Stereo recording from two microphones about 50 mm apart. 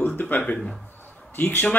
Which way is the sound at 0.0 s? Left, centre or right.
Left.